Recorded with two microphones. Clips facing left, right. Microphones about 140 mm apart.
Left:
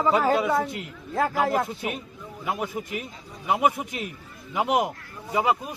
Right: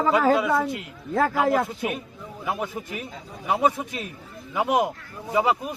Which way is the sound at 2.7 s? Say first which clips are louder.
Left 1 dB; 15° left (ahead or behind).